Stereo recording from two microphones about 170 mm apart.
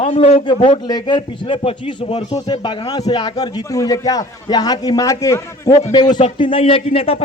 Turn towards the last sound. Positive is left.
turn(degrees=35)  # may be behind; listen again after turning